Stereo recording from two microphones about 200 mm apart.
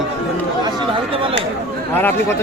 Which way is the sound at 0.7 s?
25° right (ahead or behind).